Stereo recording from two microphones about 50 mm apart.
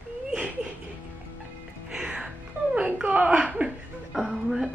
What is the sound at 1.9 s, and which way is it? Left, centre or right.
Music, centre.